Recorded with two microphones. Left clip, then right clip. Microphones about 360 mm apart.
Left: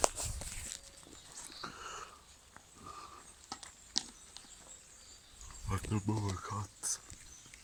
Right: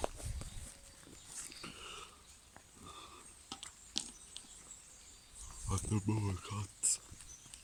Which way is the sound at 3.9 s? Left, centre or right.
Right.